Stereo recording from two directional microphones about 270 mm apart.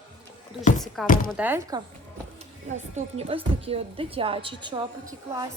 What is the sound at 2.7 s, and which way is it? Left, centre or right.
A woman's voice, right.